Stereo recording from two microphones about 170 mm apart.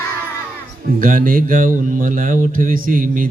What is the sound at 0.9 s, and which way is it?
Speech, 55° right (ahead or behind).